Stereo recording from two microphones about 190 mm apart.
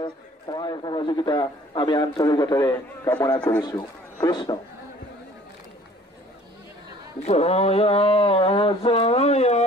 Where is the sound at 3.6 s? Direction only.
20° left (ahead or behind).